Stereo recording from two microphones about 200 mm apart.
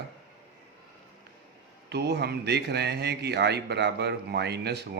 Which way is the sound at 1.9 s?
55° right (ahead or behind).